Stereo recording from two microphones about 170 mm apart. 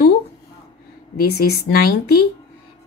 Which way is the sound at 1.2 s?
65° left (ahead or behind).